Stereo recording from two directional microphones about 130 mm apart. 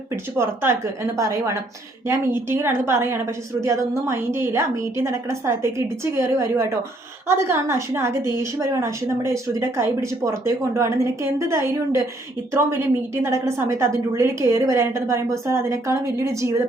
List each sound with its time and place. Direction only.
0.3 s speech: 20° right (ahead or behind)